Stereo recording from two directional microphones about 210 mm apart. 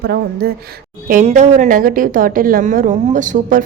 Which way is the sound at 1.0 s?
35° right (ahead or behind).